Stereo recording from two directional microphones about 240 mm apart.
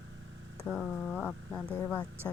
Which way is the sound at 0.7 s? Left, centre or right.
Centre.